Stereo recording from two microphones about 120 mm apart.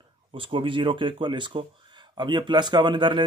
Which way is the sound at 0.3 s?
45° right (ahead or behind).